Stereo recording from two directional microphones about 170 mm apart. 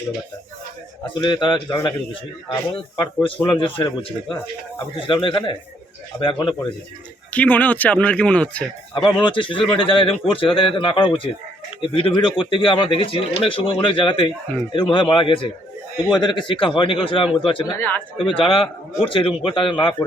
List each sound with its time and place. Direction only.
1.0 s speech: 25° left (ahead or behind)
3.0 s speech: 25° left (ahead or behind)
7.3 s a man's voice: 10° left (ahead or behind)
9.2 s speech: 30° left (ahead or behind)
17.7 s a man's voice: 10° left (ahead or behind)
18.2 s speech: 30° left (ahead or behind)